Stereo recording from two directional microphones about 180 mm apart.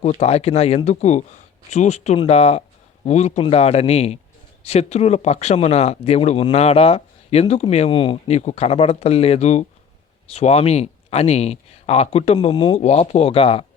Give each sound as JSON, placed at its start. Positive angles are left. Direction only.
{"t": 0.0, "sound": "speech", "side_deg": 35}